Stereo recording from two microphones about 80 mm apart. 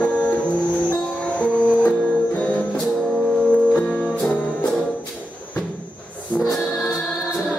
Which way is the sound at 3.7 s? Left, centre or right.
Centre.